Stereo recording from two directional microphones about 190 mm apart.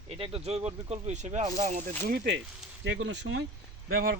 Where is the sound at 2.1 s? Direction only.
65° right (ahead or behind).